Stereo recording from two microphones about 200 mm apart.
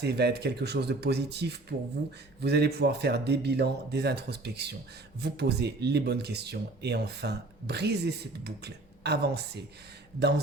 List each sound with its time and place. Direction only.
0.0 s speech: 55° right (ahead or behind)